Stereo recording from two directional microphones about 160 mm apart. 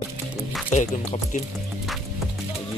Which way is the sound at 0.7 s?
50° left (ahead or behind).